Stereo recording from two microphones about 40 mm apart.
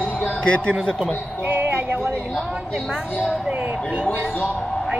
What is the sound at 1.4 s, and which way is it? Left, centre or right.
Music, right.